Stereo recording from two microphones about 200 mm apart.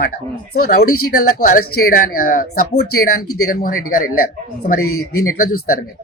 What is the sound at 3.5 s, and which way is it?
Speech, 45° left (ahead or behind).